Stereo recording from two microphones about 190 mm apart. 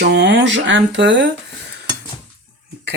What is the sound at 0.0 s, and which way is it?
Speech, 65° right (ahead or behind).